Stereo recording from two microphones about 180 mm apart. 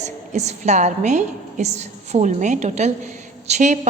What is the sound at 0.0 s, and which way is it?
A woman's voice, 40° right (ahead or behind).